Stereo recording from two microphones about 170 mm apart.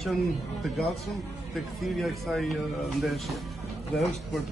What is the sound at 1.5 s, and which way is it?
Speech, centre (ahead or behind).